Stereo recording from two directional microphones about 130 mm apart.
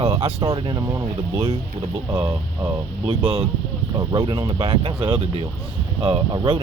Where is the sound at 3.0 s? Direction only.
45° right (ahead or behind).